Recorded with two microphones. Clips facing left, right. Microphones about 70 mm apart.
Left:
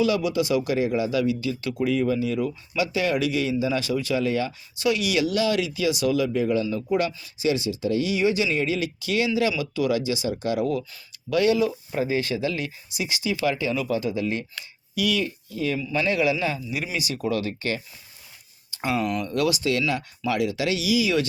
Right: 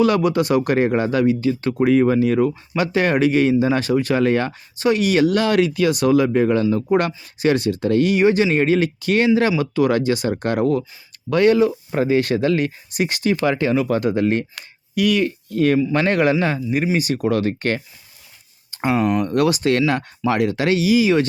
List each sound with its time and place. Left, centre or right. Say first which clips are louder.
0.0 s speech: right 6 dB; right
4.8 s speech: right 6 dB; right
11.9 s speech: right 7 dB; right
18.7 s speech: right 7 dB; right
19.2 s speech: right 6 dB; right